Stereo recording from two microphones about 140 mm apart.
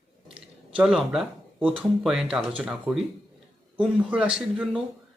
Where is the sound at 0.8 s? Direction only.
Centre (ahead or behind).